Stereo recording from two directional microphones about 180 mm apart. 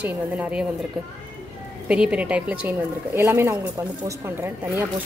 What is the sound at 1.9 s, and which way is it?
A woman's voice, 5° right (ahead or behind).